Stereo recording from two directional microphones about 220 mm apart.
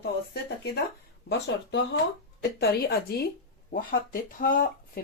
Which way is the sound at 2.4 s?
45° left (ahead or behind).